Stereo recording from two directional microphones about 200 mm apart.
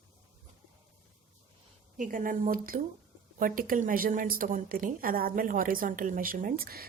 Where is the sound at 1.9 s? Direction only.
40° right (ahead or behind).